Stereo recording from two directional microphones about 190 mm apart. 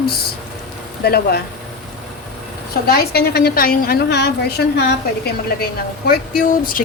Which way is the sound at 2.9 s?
55° left (ahead or behind).